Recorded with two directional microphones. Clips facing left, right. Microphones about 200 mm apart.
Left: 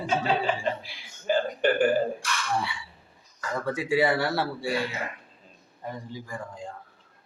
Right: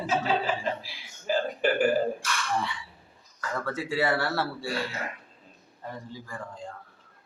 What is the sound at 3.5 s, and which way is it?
A man's voice, 15° left (ahead or behind).